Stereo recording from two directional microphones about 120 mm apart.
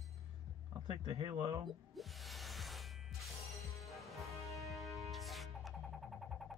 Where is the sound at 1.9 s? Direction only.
Centre (ahead or behind).